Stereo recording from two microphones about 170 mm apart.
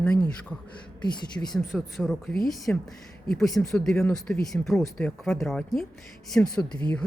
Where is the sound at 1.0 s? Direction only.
25° left (ahead or behind).